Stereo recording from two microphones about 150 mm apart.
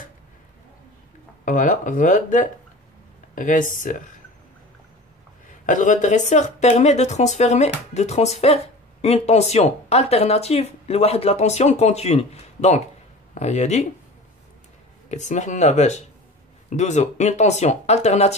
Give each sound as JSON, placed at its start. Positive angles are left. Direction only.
{"t": 1.4, "sound": "speech", "side_deg": 60}
{"t": 5.5, "sound": "speech", "side_deg": 55}
{"t": 15.0, "sound": "speech", "side_deg": 50}